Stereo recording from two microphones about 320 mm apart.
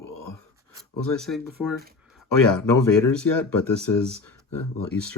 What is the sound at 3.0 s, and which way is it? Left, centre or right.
Speech, left.